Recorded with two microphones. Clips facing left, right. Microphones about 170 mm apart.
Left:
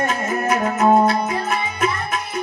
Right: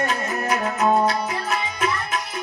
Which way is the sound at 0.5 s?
25° left (ahead or behind).